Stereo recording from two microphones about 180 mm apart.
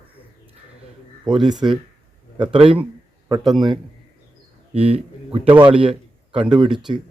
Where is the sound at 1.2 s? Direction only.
25° right (ahead or behind).